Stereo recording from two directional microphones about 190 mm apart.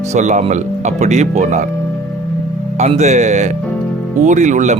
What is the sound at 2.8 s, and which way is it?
Speech, 35° right (ahead or behind).